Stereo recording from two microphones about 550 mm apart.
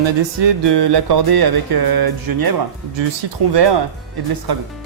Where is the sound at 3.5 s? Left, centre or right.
Right.